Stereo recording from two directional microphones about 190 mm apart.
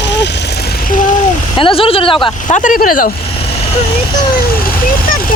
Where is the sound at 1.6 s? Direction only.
30° left (ahead or behind).